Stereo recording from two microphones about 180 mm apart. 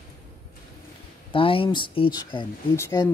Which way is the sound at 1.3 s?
30° left (ahead or behind).